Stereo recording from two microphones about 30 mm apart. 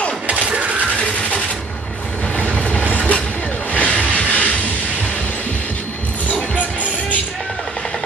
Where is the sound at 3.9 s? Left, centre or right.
Left.